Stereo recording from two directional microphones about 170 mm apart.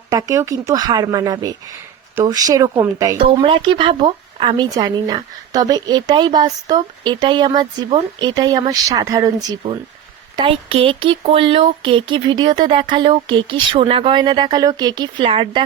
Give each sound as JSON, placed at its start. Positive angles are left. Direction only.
{"t": 0.1, "sound": "speech", "side_deg": -20}